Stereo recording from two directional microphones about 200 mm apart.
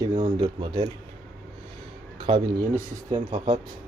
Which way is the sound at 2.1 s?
25° right (ahead or behind).